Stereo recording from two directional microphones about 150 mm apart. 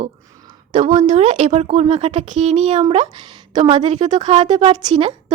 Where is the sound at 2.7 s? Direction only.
30° right (ahead or behind).